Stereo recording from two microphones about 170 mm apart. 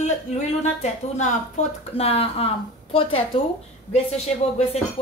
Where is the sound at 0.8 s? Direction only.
45° left (ahead or behind).